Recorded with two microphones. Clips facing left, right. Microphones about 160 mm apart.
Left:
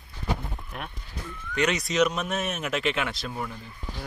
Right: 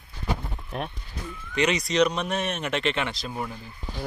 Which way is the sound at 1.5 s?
Centre (ahead or behind).